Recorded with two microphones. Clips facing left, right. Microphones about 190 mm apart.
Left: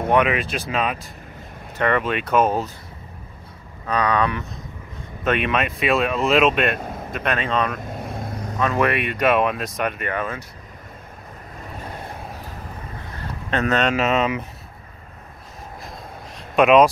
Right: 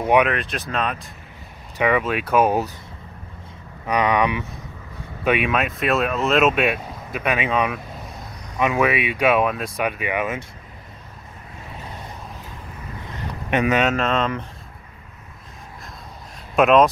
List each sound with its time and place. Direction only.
0.3 s speech: 5° left (ahead or behind)
1.8 s speech: 5° right (ahead or behind)
3.8 s speech: 15° right (ahead or behind)
8.0 s vehicle: 50° left (ahead or behind)
8.7 s speech: 5° right (ahead or behind)
13.1 s a sound: 15° right (ahead or behind)
13.9 s speech: 5° left (ahead or behind)
16.5 s speech: centre (ahead or behind)